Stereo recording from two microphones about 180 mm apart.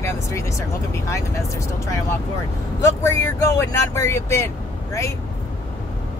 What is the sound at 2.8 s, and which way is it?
Speech, 15° left (ahead or behind).